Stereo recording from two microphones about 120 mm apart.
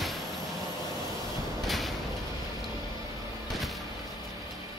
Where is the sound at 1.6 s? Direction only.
Centre (ahead or behind).